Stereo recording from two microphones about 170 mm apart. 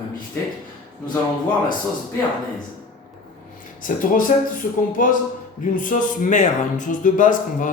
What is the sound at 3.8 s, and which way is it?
Speech, 55° left (ahead or behind).